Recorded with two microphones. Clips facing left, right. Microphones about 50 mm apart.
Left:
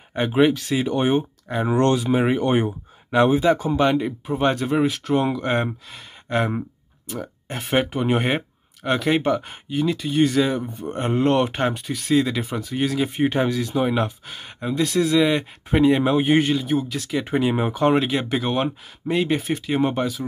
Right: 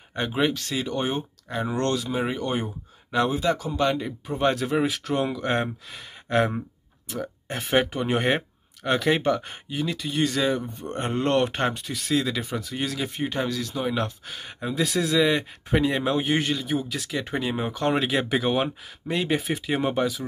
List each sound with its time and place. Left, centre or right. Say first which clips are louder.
0.1 s speech: left 6 dB; centre
0.8 s speech: left 8 dB; left
4.3 s speech: left 2 dB; centre
17.2 s speech: left 7 dB; centre